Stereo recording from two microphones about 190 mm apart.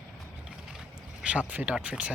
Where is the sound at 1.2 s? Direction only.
5° right (ahead or behind).